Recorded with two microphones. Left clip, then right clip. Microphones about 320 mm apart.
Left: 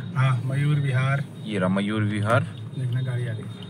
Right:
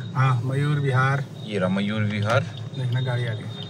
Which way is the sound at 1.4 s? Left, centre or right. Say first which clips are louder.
Even; centre.